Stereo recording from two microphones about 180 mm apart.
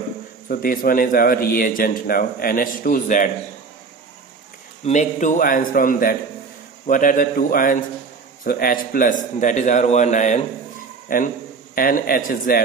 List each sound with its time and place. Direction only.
0.5 s a man's voice: 55° left (ahead or behind)
4.8 s a man's voice: 40° left (ahead or behind)